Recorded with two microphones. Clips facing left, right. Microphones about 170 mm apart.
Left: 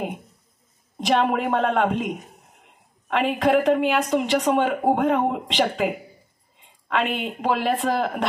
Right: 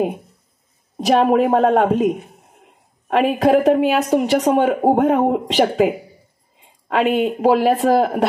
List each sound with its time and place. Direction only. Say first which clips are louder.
0.9 s a woman's voice: right 7 dB; 40° right (ahead or behind)